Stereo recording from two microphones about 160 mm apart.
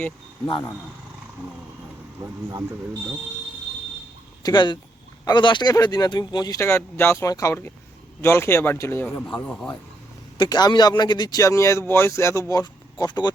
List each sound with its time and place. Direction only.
4.4 s speech: 30° left (ahead or behind); by 9.6 s 10° left (ahead or behind)
10.3 s speech: 25° left (ahead or behind)